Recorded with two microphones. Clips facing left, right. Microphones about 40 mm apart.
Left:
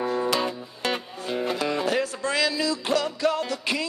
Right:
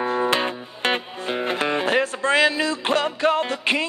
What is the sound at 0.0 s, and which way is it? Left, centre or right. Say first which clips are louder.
Music: right 3 dB; right.